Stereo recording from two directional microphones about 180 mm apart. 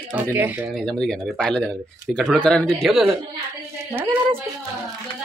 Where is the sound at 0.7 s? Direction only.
5° left (ahead or behind).